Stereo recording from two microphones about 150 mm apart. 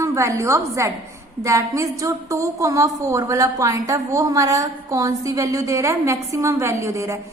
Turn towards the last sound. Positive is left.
turn(degrees=-20)  # may be behind; listen again after turning